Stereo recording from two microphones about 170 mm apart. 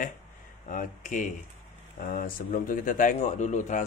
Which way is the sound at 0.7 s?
50° left (ahead or behind).